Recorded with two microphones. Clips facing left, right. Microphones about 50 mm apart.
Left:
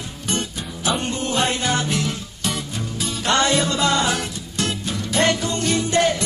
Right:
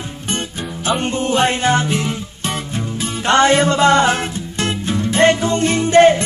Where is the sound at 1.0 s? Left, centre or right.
Right.